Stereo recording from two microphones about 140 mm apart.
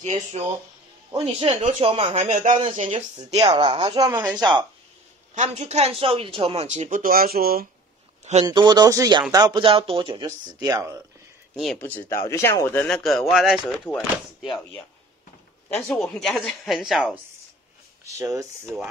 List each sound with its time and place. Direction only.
0.0 s speech: 55° right (ahead or behind)
1.1 s speech: 40° right (ahead or behind)
2.1 s speech: 60° right (ahead or behind)
3.3 s speech: 35° right (ahead or behind)
5.3 s speech: 55° right (ahead or behind); by 7.6 s 90° right
8.5 s speech: 30° right (ahead or behind)
10.2 s speech: 30° right (ahead or behind)
11.5 s speech: centre (ahead or behind)
11.8 s speech: 15° left (ahead or behind)
12.8 s speech: centre (ahead or behind)
13.7 s speech: 10° left (ahead or behind)
16.0 s speech: 5° left (ahead or behind)
18.0 s speech: 20° right (ahead or behind)
18.7 s speech: 5° right (ahead or behind)